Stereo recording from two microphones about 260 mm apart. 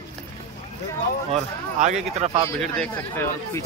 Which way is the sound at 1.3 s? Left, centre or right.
Right.